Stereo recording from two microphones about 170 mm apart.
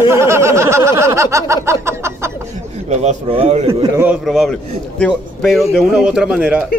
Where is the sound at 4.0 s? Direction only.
5° right (ahead or behind).